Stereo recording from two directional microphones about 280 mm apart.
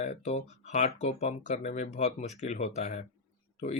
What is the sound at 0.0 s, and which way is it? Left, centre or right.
Speech, left.